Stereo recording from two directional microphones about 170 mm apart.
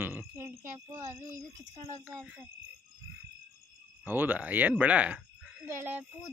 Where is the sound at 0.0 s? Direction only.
10° right (ahead or behind).